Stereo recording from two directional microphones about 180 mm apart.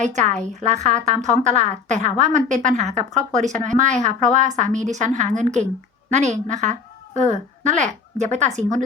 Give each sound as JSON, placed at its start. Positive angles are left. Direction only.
{"t": 0.0, "sound": "a woman's voice", "side_deg": -40}